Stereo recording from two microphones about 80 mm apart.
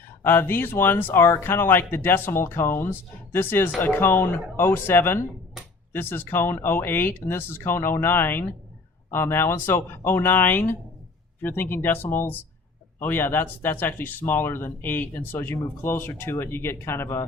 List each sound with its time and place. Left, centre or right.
0.2 s speech: left